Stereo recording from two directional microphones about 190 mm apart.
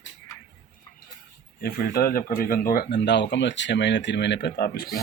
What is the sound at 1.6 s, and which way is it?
Speech, 55° left (ahead or behind).